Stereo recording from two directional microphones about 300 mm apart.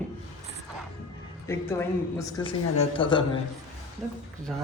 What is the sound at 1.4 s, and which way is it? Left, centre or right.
Speech, centre.